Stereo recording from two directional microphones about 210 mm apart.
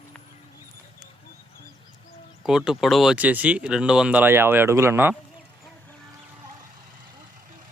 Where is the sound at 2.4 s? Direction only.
5° right (ahead or behind).